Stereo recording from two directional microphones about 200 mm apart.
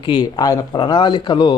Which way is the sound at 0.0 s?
25° left (ahead or behind).